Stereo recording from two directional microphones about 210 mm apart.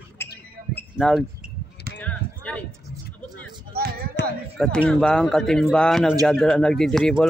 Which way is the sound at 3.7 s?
45° right (ahead or behind).